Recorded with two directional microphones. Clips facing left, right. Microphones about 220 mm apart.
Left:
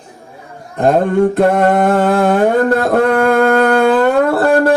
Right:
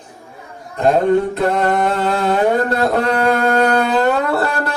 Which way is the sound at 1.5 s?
50° left (ahead or behind).